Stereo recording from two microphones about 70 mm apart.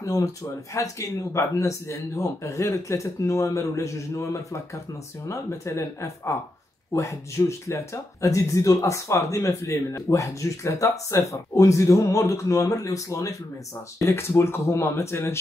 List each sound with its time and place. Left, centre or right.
0.0 s speech: left